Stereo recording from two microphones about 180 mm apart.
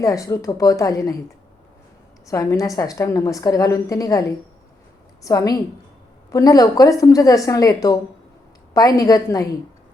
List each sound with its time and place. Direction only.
0.0 s a woman's voice: 20° left (ahead or behind)
2.2 s a woman's voice: 20° left (ahead or behind)